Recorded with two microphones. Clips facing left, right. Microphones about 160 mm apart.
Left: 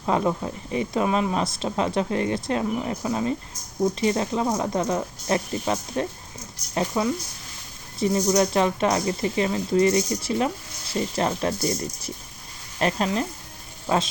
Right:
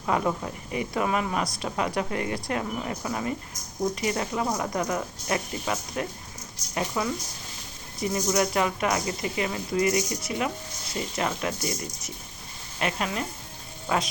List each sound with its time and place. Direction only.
0.0 s speech: 20° left (ahead or behind)